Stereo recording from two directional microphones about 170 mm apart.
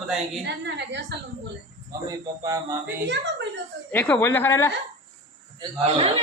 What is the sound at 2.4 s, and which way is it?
Music, 20° right (ahead or behind).